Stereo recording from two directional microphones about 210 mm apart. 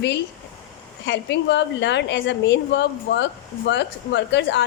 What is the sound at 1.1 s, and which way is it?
A woman's voice, 55° left (ahead or behind).